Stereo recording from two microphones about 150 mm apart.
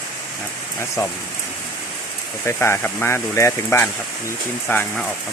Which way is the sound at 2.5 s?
15° left (ahead or behind).